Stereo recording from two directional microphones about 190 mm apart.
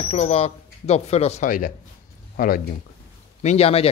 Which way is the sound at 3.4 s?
35° left (ahead or behind).